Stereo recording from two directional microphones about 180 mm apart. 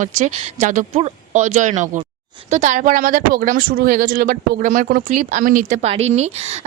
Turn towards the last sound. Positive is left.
turn(degrees=-35)  # may be behind; listen again after turning